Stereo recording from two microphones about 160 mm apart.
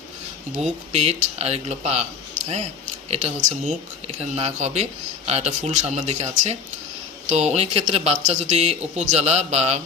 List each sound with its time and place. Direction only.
0.9 s speech: 40° right (ahead or behind)